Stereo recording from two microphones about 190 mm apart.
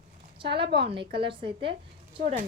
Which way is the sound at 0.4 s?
60° right (ahead or behind).